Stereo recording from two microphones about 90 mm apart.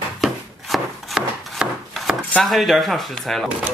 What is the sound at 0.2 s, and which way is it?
Chopping, centre (ahead or behind).